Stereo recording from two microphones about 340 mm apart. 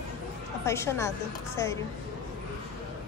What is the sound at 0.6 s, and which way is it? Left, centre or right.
Speech, centre.